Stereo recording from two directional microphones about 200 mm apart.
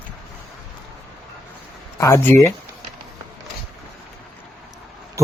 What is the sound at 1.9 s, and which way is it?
Speech, 15° left (ahead or behind).